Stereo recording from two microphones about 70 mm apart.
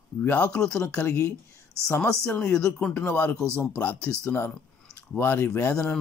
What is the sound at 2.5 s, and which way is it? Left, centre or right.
Speech, centre.